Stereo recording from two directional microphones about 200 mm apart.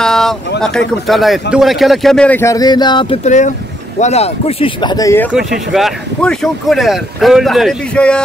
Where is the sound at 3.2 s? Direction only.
35° left (ahead or behind); by 5.3 s 15° left (ahead or behind).